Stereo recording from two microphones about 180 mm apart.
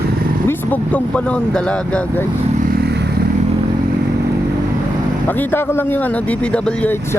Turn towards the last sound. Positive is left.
turn(degrees=10)  # may be behind; listen again after turning